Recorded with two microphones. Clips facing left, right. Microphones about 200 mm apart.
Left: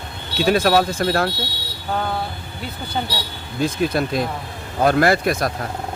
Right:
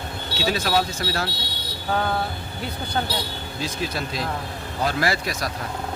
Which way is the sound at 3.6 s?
55° left (ahead or behind).